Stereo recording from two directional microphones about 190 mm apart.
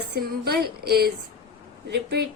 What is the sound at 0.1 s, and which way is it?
A woman's voice, 55° right (ahead or behind).